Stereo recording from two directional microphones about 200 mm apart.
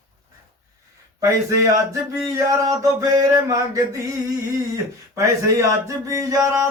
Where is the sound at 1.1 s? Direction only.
15° right (ahead or behind).